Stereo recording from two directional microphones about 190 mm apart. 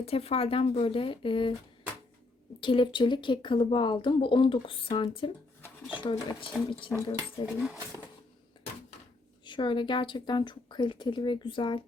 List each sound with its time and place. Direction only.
0.0 s speech: 30° left (ahead or behind)
2.6 s speech: 25° left (ahead or behind)
9.4 s speech: 25° left (ahead or behind)